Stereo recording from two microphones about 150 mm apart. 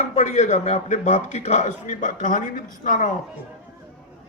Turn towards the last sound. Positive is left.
turn(degrees=60)  # may be behind; listen again after turning